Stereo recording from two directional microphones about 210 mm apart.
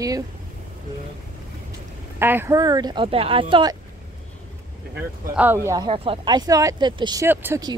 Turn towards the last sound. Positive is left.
turn(degrees=-15)  # may be behind; listen again after turning